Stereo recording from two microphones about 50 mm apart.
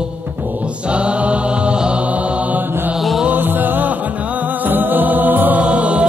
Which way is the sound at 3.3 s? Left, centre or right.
Right.